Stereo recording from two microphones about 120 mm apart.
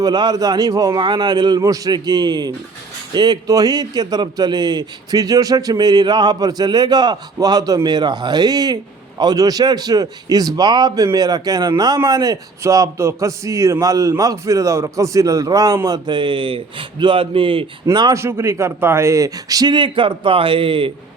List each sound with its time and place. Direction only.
0.0 s a man's voice: 35° right (ahead or behind)
18.1 s a man's voice: 25° right (ahead or behind); by 20.9 s 50° right (ahead or behind)